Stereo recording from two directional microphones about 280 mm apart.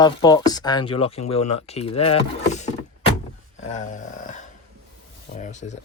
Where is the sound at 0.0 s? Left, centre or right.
Centre.